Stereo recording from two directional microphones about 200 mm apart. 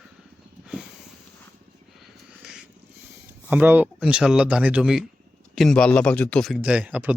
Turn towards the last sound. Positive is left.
turn(degrees=-5)  # may be behind; listen again after turning